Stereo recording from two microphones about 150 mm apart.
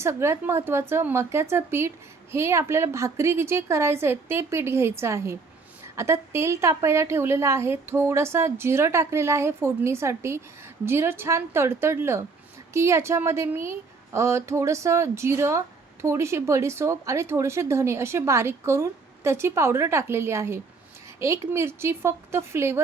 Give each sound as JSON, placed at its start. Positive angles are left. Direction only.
{"t": 0.0, "sound": "a woman's voice", "side_deg": -15}